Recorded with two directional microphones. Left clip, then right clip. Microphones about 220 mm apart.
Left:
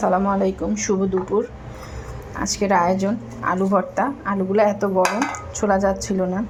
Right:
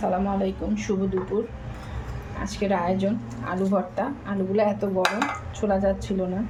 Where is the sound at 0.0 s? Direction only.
20° left (ahead or behind).